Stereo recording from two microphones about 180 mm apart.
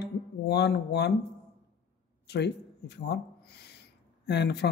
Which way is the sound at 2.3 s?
70° left (ahead or behind).